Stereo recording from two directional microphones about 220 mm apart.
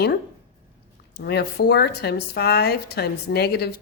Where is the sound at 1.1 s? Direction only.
45° left (ahead or behind).